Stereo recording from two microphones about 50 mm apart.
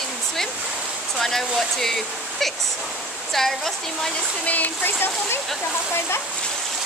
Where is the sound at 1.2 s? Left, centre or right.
Centre.